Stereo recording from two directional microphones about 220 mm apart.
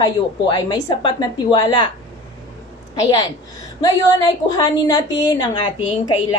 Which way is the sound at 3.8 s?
15° left (ahead or behind).